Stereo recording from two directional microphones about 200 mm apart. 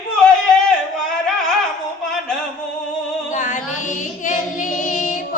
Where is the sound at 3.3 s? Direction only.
40° left (ahead or behind).